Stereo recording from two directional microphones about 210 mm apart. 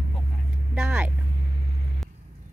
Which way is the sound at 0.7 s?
5° right (ahead or behind).